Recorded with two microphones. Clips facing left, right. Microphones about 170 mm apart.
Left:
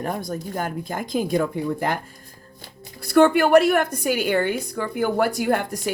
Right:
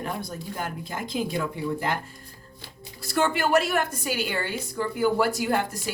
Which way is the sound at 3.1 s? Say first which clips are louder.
Left 8 dB; 55° left (ahead or behind).